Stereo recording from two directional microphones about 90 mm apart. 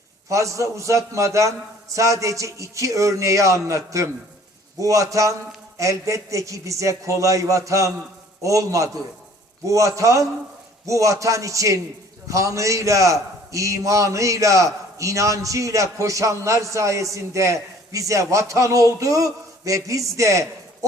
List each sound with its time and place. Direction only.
0.3 s a man's voice: 35° right (ahead or behind)